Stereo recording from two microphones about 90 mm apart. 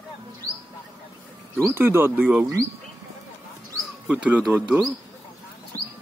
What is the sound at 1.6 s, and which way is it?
Speech, 25° right (ahead or behind).